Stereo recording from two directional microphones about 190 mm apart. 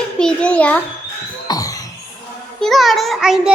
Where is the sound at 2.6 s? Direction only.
Centre (ahead or behind).